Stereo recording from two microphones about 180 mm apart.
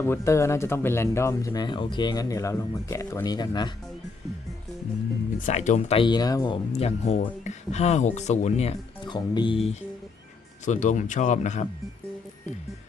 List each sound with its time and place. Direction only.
0.0 s speech: 15° left (ahead or behind)
5.5 s speech: 40° left (ahead or behind); by 6.6 s 20° left (ahead or behind)
6.7 s speech: 35° left (ahead or behind)
9.0 s speech: 25° left (ahead or behind)
10.7 s speech: 45° left (ahead or behind)